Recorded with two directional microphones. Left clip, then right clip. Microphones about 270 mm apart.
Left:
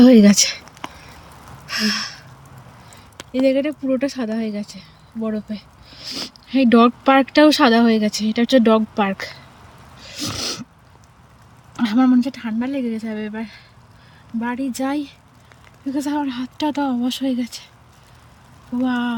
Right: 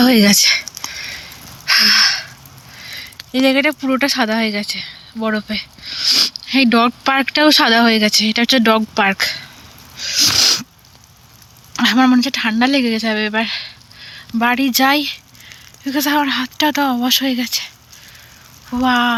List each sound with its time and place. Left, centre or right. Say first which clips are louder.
0.0 s a sound: right 1 dB; centre
3.3 s speech: right 4 dB; centre
10.0 s wheeze: right 14 dB; centre
11.8 s speech: right 5 dB; centre
12.6 s speech: right 9 dB; centre
14.3 s speech: right 10 dB; right
14.7 s speech: right 10 dB; centre
18.8 s speech: right 8 dB; centre